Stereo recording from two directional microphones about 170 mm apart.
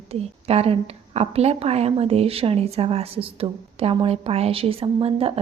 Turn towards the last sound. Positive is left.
turn(degrees=-35)  # may be behind; listen again after turning